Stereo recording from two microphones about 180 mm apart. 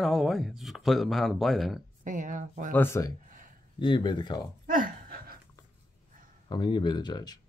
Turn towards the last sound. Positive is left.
turn(degrees=25)  # may be behind; listen again after turning